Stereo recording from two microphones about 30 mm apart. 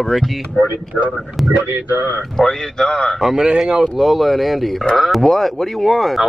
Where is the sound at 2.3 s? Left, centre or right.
Centre.